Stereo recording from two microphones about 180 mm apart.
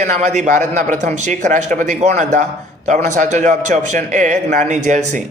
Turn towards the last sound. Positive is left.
turn(degrees=-40)  # may be behind; listen again after turning